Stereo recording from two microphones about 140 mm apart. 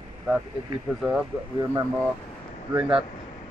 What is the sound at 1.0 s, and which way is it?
Speech, 5° right (ahead or behind).